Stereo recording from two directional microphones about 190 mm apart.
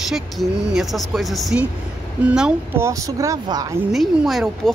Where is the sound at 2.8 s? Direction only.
15° right (ahead or behind).